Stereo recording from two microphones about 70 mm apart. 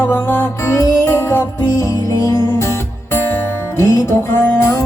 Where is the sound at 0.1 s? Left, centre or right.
Left.